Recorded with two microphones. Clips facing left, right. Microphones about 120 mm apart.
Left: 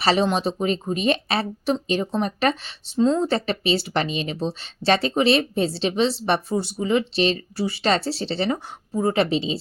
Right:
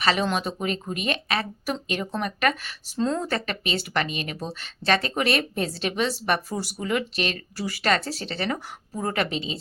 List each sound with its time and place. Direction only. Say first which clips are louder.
0.0 s speech: left 4 dB; 35° left (ahead or behind)